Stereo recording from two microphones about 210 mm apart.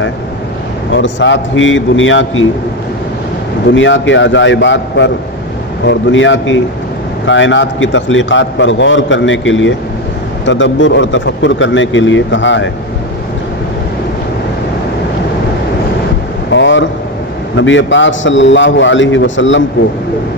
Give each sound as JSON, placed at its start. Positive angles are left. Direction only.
{"t": 0.9, "sound": "a man's voice", "side_deg": 60}
{"t": 3.7, "sound": "a man's voice", "side_deg": 60}
{"t": 16.5, "sound": "a sound", "side_deg": 60}
{"t": 17.6, "sound": "a man's voice", "side_deg": 60}